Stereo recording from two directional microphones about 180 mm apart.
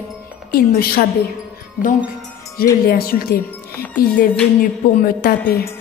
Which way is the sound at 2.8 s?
55° left (ahead or behind).